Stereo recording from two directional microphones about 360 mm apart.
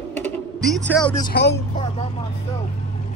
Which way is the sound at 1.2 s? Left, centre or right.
Left.